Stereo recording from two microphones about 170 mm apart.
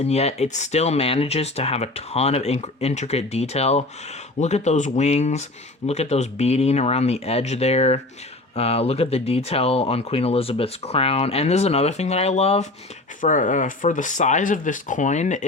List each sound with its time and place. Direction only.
0.0 s speech: 40° left (ahead or behind)